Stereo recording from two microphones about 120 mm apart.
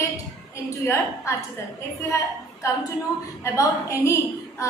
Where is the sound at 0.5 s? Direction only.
25° left (ahead or behind).